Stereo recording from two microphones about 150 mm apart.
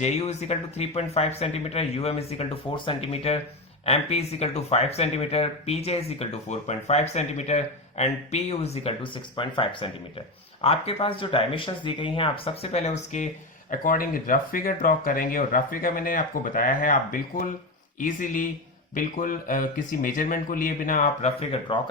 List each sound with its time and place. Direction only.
0.0 s speech: 45° left (ahead or behind)